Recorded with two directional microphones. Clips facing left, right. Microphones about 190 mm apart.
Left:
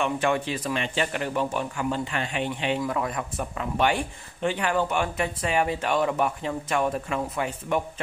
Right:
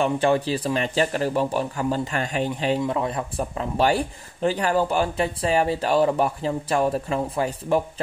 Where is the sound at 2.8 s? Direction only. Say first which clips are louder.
Right 3 dB; 25° right (ahead or behind).